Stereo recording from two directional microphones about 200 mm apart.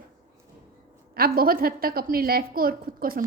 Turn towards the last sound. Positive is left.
turn(degrees=-45)  # may be behind; listen again after turning